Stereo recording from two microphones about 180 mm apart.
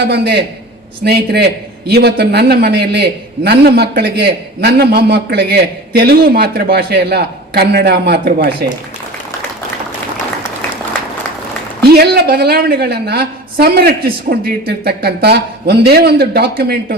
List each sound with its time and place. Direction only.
0.1 s a man's voice: 65° right (ahead or behind)
11.8 s a man's voice: 60° right (ahead or behind)